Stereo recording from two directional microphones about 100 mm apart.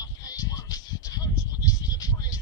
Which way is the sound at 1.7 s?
40° left (ahead or behind).